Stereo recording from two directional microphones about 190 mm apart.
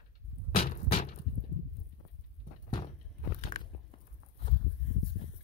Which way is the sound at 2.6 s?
30° left (ahead or behind).